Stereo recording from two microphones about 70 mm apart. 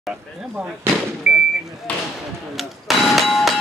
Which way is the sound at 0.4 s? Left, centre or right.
Centre.